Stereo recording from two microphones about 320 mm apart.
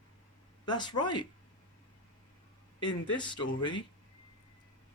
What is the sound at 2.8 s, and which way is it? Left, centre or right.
Speech, centre.